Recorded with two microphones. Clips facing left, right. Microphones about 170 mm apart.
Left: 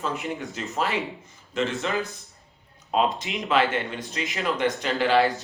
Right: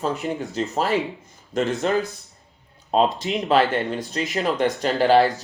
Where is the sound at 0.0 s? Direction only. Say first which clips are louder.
Right 4 dB; 35° right (ahead or behind).